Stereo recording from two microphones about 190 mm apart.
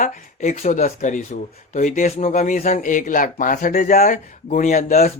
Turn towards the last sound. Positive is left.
turn(degrees=35)  # may be behind; listen again after turning